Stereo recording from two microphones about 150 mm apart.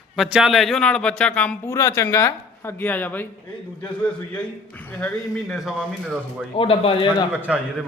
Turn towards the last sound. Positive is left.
turn(degrees=-10)  # may be behind; listen again after turning